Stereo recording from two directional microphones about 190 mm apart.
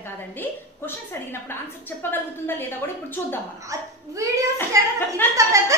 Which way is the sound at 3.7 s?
15° right (ahead or behind).